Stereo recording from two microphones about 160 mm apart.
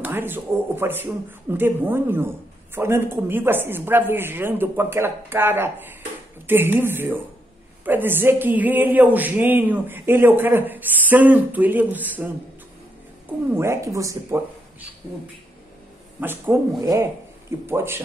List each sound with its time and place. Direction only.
0.0 s a woman's voice: 15° right (ahead or behind)
13.5 s a woman's voice: 15° right (ahead or behind)
16.2 s a woman's voice: 15° right (ahead or behind)